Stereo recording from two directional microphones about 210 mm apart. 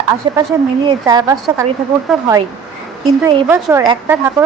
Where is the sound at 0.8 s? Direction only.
20° right (ahead or behind).